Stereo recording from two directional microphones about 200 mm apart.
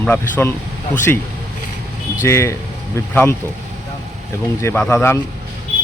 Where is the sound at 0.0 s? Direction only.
10° left (ahead or behind).